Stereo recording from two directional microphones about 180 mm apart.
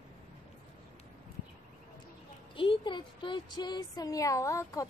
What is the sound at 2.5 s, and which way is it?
Speech, 30° left (ahead or behind).